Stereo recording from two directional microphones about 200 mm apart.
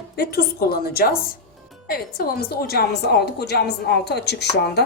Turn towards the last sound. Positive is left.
turn(degrees=55)  # may be behind; listen again after turning